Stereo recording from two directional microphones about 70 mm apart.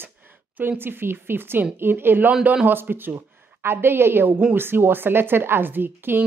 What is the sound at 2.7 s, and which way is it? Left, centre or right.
A woman's voice, right.